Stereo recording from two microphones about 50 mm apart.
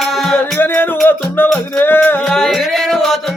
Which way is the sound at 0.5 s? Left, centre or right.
Left.